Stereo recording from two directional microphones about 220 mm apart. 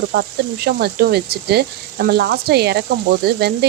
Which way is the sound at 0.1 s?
45° right (ahead or behind).